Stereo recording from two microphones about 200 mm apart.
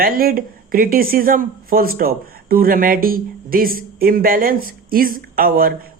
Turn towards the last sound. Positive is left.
turn(degrees=-45)  # may be behind; listen again after turning